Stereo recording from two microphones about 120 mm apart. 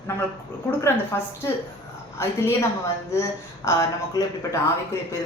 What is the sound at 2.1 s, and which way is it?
Speech, 25° left (ahead or behind).